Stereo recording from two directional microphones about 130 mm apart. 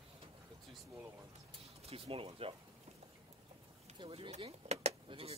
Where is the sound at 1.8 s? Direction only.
50° right (ahead or behind).